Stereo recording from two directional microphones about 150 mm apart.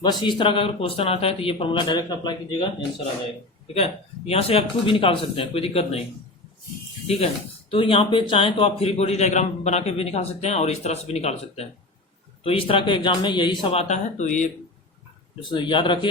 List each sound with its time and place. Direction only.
0.0 s speech: 30° left (ahead or behind)
3.8 s speech: 40° left (ahead or behind)
7.7 s a man's voice: 35° left (ahead or behind)
13.7 s a man's voice: 45° left (ahead or behind)
15.4 s speech: 35° left (ahead or behind)